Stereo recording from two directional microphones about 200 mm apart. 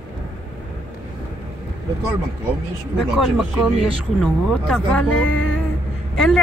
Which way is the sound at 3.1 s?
Centre (ahead or behind).